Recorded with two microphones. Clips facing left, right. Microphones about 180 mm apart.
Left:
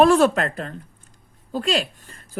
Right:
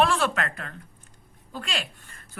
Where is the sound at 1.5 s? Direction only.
40° left (ahead or behind).